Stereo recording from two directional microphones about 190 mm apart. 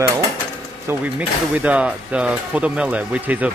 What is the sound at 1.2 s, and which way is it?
Speech, 5° right (ahead or behind).